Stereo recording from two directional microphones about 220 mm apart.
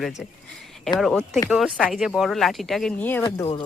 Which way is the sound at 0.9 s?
Centre (ahead or behind).